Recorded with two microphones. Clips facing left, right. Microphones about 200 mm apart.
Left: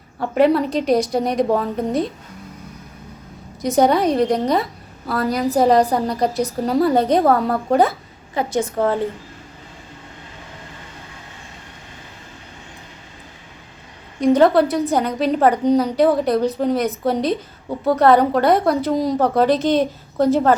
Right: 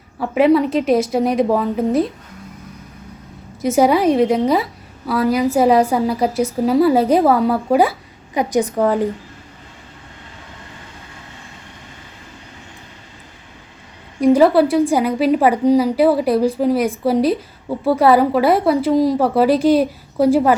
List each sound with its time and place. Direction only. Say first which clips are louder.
0.2 s a woman's voice: right 2 dB; centre (ahead or behind)
3.6 s a woman's voice: right 2 dB; 5° right (ahead or behind)
14.2 s a woman's voice: right 2 dB; 5° right (ahead or behind)